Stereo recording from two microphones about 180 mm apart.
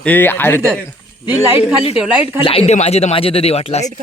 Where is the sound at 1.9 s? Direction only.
5° right (ahead or behind).